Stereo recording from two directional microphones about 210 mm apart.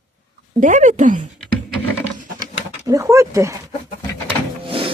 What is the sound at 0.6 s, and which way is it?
Speech, 35° right (ahead or behind).